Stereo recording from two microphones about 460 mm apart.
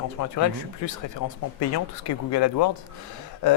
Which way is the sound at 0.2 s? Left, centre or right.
Left.